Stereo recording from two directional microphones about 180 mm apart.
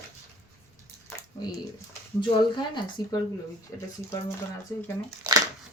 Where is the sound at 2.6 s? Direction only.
20° left (ahead or behind).